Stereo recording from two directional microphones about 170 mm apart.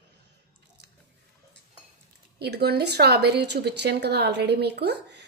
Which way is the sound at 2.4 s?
70° right (ahead or behind).